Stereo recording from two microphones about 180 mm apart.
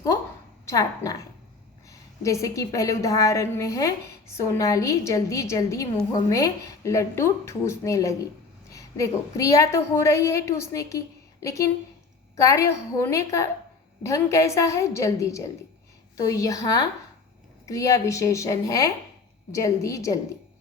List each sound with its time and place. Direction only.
0.6 s a woman's voice: 20° left (ahead or behind)